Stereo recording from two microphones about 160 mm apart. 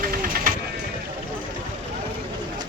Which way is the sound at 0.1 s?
60° right (ahead or behind).